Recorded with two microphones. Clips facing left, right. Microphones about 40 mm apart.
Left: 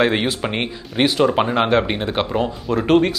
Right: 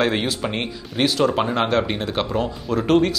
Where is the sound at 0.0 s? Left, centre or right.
Centre.